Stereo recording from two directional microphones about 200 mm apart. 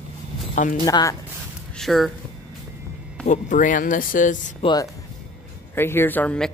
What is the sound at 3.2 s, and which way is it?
Speech, 40° left (ahead or behind).